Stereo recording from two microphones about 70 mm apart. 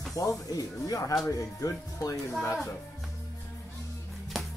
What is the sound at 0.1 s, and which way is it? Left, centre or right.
Speech, left.